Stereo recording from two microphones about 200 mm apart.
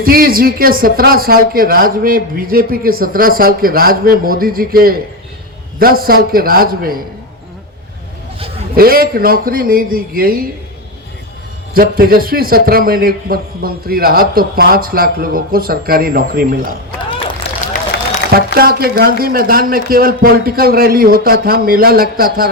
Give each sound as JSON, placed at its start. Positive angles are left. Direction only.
{"t": 0.0, "sound": "a man's voice", "side_deg": -45}
{"t": 8.7, "sound": "a man's voice", "side_deg": -50}
{"t": 11.7, "sound": "a man's voice", "side_deg": -45}
{"t": 18.3, "sound": "a man's voice", "side_deg": -50}